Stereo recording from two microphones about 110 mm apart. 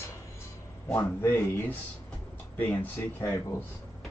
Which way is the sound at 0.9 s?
20° left (ahead or behind).